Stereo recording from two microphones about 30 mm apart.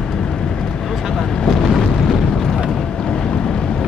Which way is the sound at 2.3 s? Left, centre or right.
Centre.